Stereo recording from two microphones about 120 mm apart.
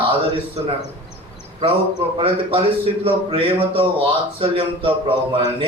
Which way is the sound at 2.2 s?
50° right (ahead or behind).